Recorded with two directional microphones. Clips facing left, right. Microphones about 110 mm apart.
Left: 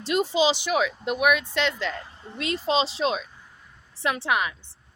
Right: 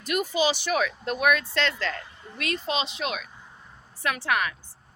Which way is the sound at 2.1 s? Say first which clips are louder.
Left 2 dB; 25° left (ahead or behind).